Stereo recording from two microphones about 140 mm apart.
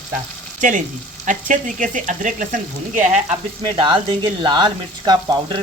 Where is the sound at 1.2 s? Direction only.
65° right (ahead or behind).